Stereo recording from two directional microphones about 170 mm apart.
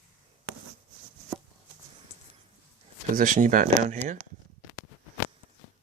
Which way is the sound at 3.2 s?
50° right (ahead or behind).